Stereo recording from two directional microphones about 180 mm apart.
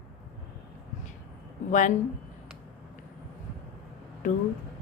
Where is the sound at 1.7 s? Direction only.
45° left (ahead or behind).